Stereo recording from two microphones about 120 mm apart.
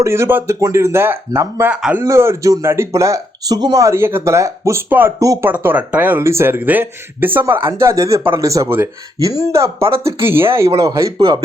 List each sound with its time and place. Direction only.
0.0 s speech: 20° right (ahead or behind)
1.7 s speech: 10° right (ahead or behind)
2.0 s speech: 25° right (ahead or behind)
5.2 s speech: 30° right (ahead or behind)
5.5 s speech: 15° right (ahead or behind); by 11.3 s 30° right (ahead or behind)